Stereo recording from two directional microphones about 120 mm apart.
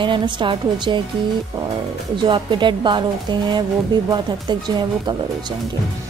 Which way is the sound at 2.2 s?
40° right (ahead or behind).